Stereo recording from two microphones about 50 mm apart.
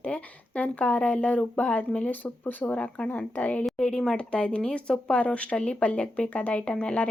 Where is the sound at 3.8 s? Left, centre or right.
Centre.